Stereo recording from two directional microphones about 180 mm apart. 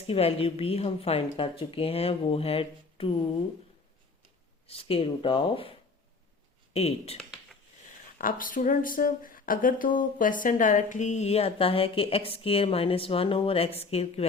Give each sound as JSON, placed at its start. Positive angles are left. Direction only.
{"t": 0.1, "sound": "speech", "side_deg": 35}
{"t": 4.6, "sound": "speech", "side_deg": 30}
{"t": 6.7, "sound": "speech", "side_deg": 35}
{"t": 8.2, "sound": "speech", "side_deg": 50}